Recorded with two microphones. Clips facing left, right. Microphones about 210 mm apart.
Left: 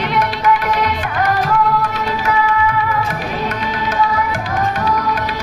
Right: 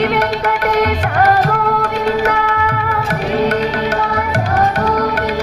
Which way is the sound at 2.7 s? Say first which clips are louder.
Even; 70° right (ahead or behind).